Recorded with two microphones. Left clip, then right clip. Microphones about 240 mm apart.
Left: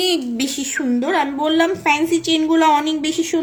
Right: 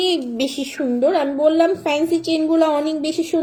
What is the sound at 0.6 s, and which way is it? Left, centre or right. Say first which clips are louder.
A woman's voice: right 3 dB; centre.